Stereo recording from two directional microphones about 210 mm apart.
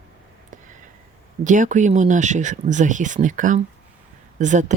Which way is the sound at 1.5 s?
35° right (ahead or behind).